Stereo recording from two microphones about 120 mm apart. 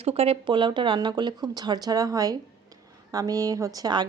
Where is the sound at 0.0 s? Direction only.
55° right (ahead or behind).